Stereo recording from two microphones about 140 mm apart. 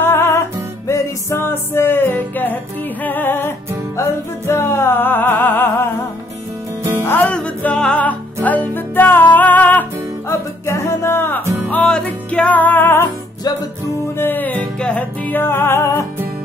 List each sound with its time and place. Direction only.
0.0 s music: 15° left (ahead or behind)
7.1 s music: 10° left (ahead or behind)